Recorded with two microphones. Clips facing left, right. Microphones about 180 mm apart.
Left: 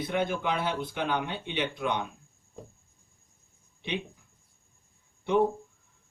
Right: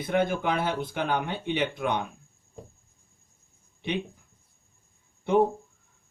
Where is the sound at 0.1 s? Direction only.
50° right (ahead or behind).